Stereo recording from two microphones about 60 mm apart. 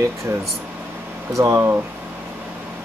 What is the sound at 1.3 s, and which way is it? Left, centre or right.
Speech, right.